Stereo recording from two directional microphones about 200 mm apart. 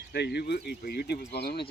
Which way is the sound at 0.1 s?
55° left (ahead or behind).